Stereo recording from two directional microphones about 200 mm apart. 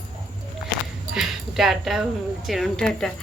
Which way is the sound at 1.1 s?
Centre (ahead or behind).